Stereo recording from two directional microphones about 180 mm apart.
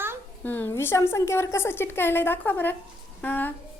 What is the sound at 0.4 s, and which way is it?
A woman's voice, 10° left (ahead or behind).